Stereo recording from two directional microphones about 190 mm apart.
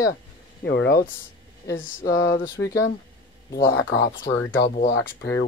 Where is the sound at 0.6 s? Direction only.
60° left (ahead or behind).